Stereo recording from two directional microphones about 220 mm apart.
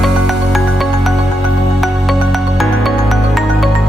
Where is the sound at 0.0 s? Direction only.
Centre (ahead or behind).